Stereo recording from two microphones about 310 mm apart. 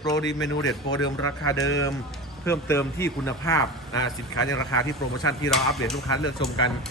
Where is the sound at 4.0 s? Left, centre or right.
Left.